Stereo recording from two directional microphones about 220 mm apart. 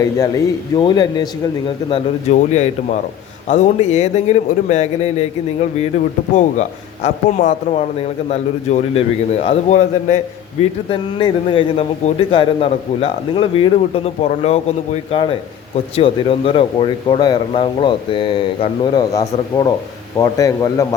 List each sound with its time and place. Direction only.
0.0 s speech: 15° left (ahead or behind)
1.9 s a man's voice: 30° left (ahead or behind)
6.3 s a man's voice: 35° left (ahead or behind)
10.8 s a man's voice: 25° left (ahead or behind)